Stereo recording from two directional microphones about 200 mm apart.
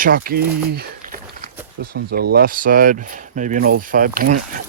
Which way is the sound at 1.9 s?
50° right (ahead or behind).